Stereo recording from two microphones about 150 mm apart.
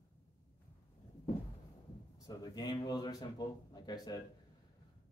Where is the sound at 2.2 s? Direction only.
25° left (ahead or behind).